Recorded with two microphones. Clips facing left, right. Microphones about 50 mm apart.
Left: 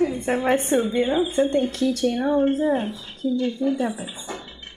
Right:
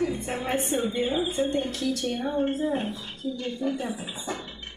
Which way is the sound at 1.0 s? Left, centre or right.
Centre.